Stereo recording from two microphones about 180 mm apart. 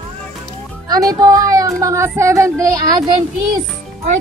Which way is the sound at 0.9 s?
20° right (ahead or behind).